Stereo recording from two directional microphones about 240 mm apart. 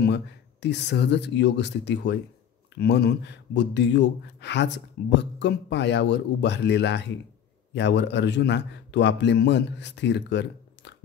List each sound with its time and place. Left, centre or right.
0.0 s a man's voice: left